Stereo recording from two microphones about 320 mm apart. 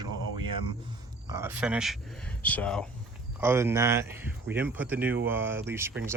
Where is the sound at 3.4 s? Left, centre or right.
Centre.